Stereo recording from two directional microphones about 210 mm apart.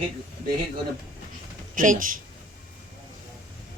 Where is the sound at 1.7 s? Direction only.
40° right (ahead or behind).